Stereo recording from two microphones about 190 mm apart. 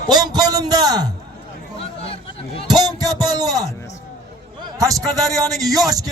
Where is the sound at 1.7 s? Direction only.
30° left (ahead or behind).